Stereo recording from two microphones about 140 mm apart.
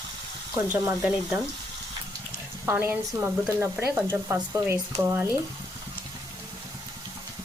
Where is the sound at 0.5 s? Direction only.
10° right (ahead or behind).